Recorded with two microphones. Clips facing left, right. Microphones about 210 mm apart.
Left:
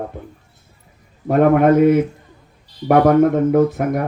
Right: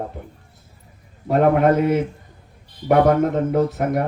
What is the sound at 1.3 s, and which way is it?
Speech, 55° left (ahead or behind).